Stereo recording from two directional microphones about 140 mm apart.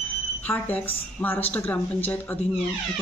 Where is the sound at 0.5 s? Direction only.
15° left (ahead or behind).